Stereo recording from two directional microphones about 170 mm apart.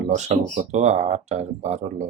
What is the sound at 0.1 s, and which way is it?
Speech, 40° right (ahead or behind).